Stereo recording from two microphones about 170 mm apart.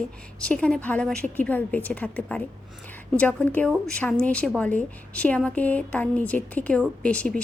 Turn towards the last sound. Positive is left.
turn(degrees=5)  # may be behind; listen again after turning